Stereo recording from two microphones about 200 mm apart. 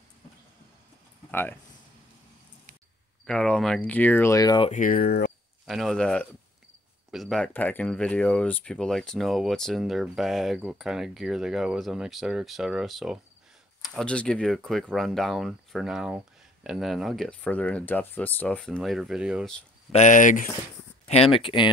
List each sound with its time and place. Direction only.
1.3 s speech: 10° left (ahead or behind)
3.3 s speech: 5° left (ahead or behind)
4.6 s speech: 40° left (ahead or behind)
5.7 s speech: centre (ahead or behind)
19.9 s speech: 35° left (ahead or behind)
21.1 s speech: 30° left (ahead or behind)